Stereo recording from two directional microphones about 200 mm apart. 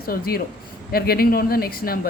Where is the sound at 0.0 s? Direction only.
50° left (ahead or behind).